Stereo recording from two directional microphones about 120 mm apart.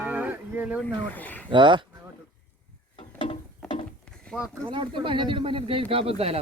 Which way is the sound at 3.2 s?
45° left (ahead or behind).